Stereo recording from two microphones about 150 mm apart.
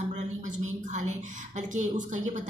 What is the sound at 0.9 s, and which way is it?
A woman's voice, 55° right (ahead or behind).